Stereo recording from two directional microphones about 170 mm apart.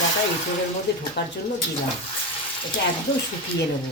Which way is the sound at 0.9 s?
75° left (ahead or behind).